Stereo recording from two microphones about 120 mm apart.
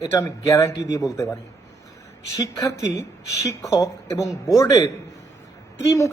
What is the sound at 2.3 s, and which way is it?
A man's voice, 30° left (ahead or behind).